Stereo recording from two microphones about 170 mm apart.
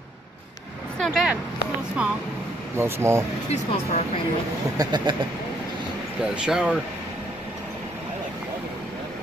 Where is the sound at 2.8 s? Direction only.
15° right (ahead or behind).